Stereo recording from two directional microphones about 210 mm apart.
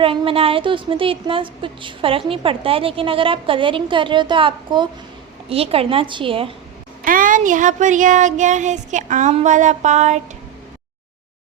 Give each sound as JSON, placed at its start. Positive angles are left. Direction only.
{"t": 0.0, "sound": "speech", "side_deg": -25}
{"t": 7.0, "sound": "speech", "side_deg": -40}